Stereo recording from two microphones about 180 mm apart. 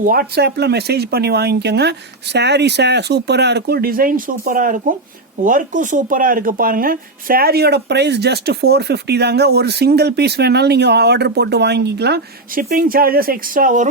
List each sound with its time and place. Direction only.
0.0 s speech: 55° right (ahead or behind)